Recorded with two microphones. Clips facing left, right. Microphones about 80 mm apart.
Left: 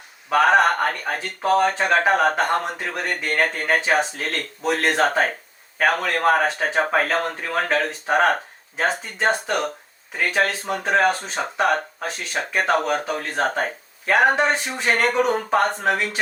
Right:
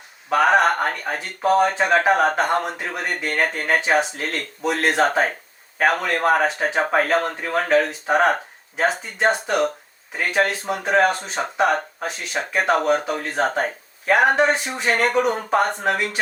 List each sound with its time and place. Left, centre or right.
0.3 s speech: centre
6.3 s speech: centre
7.4 s speech: centre
8.0 s speech: centre